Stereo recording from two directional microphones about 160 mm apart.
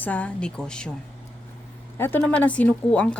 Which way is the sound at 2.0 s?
10° left (ahead or behind).